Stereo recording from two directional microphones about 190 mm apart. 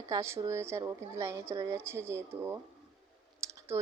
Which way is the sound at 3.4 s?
15° right (ahead or behind).